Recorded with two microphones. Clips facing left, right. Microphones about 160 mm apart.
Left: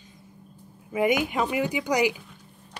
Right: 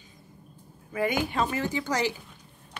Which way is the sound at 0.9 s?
20° left (ahead or behind).